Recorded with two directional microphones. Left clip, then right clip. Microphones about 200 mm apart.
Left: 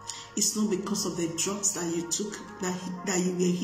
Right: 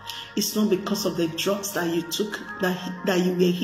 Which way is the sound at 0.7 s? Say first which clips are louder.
Right 6 dB; 20° left (ahead or behind).